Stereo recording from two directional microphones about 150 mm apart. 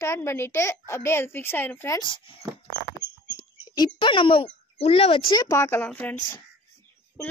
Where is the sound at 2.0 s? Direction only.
35° left (ahead or behind).